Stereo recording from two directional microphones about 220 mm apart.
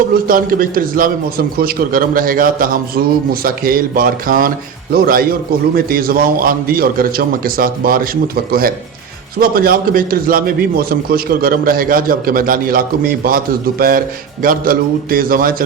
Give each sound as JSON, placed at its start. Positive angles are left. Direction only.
{"t": 0.3, "sound": "a man's voice", "side_deg": -40}